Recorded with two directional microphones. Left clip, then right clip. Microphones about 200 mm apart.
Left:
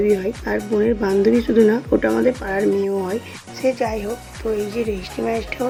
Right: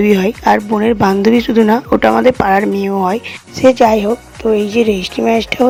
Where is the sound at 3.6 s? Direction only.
40° right (ahead or behind).